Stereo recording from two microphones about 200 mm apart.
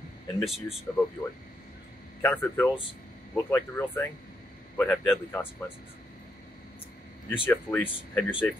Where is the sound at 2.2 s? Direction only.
10° left (ahead or behind).